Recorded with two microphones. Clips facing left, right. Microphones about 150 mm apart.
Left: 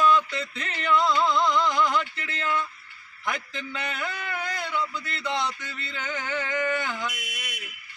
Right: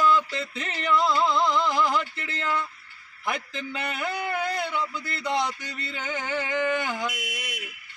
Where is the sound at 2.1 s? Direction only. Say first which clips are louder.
Even; 30° right (ahead or behind).